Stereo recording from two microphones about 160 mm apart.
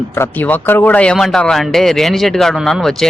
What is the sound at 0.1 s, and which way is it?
Speech, 10° left (ahead or behind).